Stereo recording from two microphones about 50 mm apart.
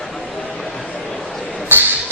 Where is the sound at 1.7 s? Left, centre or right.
Right.